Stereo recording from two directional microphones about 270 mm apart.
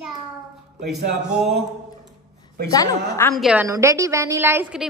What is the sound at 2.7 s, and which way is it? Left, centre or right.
Speech, centre.